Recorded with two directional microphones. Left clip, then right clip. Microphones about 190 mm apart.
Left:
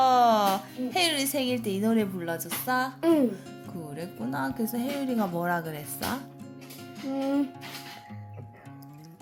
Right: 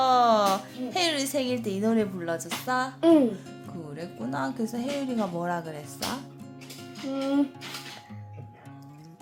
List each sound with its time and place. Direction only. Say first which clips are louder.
0.0 s music: even; 10° left (ahead or behind)
3.0 s speech: right 5 dB; centre (ahead or behind)
3.9 s speech: right 1 dB; 15° left (ahead or behind)